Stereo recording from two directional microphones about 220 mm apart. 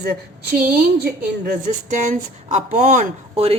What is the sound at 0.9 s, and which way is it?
A woman's voice, 45° right (ahead or behind).